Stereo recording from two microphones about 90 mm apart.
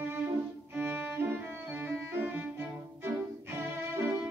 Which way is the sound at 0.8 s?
25° right (ahead or behind).